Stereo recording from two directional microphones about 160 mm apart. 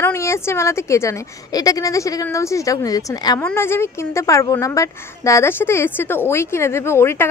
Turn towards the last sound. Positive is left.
turn(degrees=15)  # may be behind; listen again after turning